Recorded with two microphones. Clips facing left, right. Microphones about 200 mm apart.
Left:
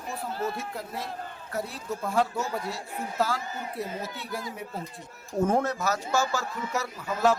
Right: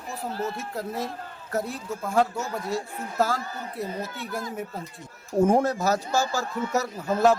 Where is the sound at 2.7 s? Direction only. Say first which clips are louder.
Right 4 dB; 45° right (ahead or behind).